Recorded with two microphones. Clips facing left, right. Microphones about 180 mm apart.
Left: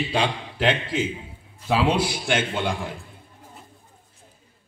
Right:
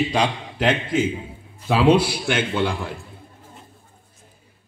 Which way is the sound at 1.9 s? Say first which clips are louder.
Right 5 dB; 65° right (ahead or behind).